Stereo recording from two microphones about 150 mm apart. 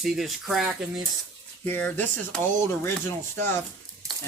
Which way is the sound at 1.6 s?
10° left (ahead or behind).